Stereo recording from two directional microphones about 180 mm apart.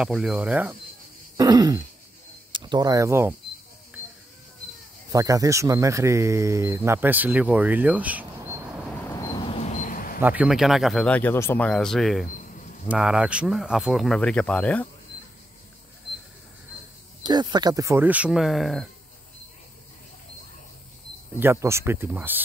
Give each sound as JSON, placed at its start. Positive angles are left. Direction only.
{"t": 0.0, "sound": "speech", "side_deg": -5}
{"t": 1.3, "sound": "throat clearing", "side_deg": -20}
{"t": 2.5, "sound": "speech", "side_deg": -25}
{"t": 5.1, "sound": "speech", "side_deg": -20}
{"t": 9.1, "sound": "a sound", "side_deg": 25}
{"t": 9.7, "sound": "a sound", "side_deg": 45}
{"t": 10.2, "sound": "speech", "side_deg": -5}
{"t": 17.2, "sound": "speech", "side_deg": -25}
{"t": 21.4, "sound": "speech", "side_deg": -15}